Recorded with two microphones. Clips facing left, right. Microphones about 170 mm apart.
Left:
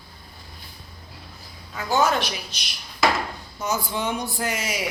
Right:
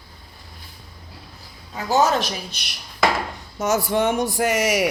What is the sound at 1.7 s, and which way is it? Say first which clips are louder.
Speech: right 3 dB; 35° right (ahead or behind).